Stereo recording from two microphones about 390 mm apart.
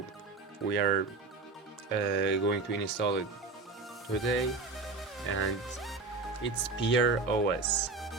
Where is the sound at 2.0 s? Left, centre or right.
Left.